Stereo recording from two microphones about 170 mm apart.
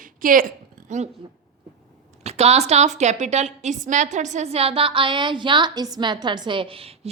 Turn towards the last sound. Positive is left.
turn(degrees=-35)  # may be behind; listen again after turning